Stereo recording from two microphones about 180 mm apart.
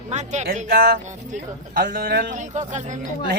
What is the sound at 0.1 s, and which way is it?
A man's voice, 40° right (ahead or behind).